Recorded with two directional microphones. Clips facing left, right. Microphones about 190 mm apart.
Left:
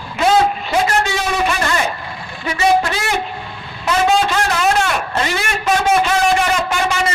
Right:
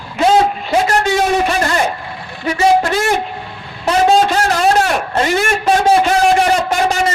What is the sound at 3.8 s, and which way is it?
A man's voice, 35° right (ahead or behind).